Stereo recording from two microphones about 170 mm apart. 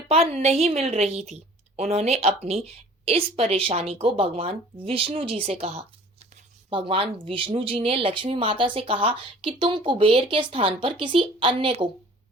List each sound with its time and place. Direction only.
0.1 s a woman's voice: 35° right (ahead or behind)